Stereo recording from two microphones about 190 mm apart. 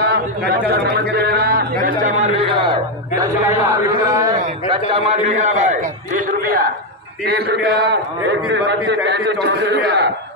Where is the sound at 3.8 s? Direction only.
20° right (ahead or behind).